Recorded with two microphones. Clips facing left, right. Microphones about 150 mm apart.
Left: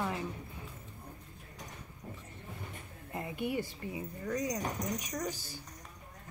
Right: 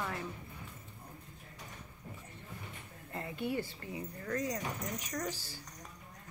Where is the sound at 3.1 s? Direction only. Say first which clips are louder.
Left 1 dB; 15° left (ahead or behind).